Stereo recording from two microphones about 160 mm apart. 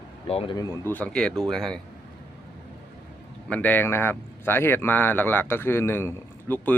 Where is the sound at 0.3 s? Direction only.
40° left (ahead or behind).